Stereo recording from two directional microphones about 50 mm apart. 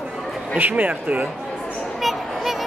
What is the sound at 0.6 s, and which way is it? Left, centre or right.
Speech, right.